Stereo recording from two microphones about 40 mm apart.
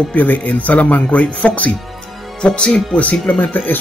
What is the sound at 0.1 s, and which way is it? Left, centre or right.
Speech, left.